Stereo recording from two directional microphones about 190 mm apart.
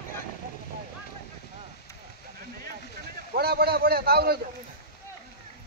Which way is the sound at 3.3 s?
55° right (ahead or behind).